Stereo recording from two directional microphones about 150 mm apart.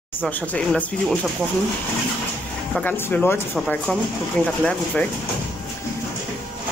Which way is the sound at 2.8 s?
15° left (ahead or behind).